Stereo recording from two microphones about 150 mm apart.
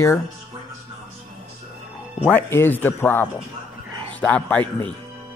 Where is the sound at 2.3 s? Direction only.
15° left (ahead or behind).